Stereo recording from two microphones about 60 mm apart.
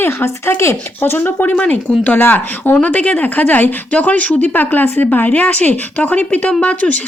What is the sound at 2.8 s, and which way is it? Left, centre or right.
Speech, left.